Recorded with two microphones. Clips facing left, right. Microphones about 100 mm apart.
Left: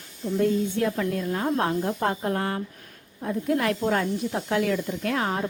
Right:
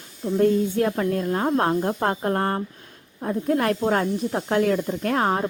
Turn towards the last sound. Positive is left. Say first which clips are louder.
# right 4 dB
turn(degrees=-35)  # may be behind; listen again after turning